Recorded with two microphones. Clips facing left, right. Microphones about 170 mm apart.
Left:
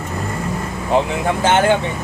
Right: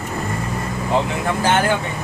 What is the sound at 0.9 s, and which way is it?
Speech, 20° left (ahead or behind).